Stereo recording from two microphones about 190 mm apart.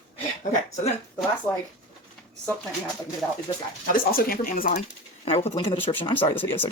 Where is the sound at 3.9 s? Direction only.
50° left (ahead or behind).